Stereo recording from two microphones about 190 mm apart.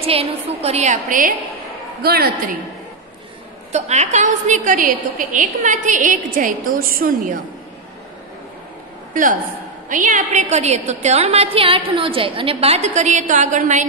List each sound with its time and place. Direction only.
0.0 s a woman's voice: 30° right (ahead or behind)
2.0 s a woman's voice: 55° right (ahead or behind)
3.7 s a woman's voice: 35° right (ahead or behind)
9.8 s a woman's voice: 45° right (ahead or behind)